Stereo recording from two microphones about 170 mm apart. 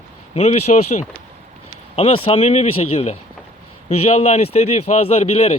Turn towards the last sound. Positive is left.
turn(degrees=40)  # may be behind; listen again after turning